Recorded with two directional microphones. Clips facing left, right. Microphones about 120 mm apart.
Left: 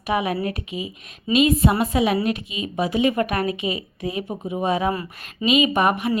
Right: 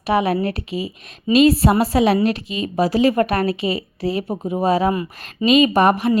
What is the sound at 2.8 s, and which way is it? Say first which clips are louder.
Speech: right 4 dB; 35° right (ahead or behind).